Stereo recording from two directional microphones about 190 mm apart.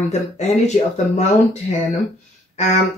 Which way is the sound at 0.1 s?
35° left (ahead or behind).